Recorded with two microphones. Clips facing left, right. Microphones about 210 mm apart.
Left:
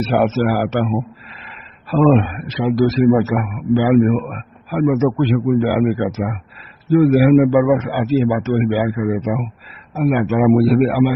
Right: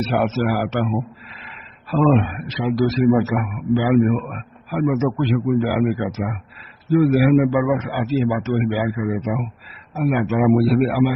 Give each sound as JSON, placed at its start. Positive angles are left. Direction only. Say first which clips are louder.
{"t": 0.1, "sound": "a man's voice", "louder": "left 5 dB", "side_deg": 50}
{"t": 1.9, "sound": "a man's voice", "louder": "left 3 dB", "side_deg": 50}